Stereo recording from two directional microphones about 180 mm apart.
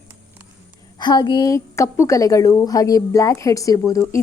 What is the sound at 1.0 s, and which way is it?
A woman's voice, 25° left (ahead or behind).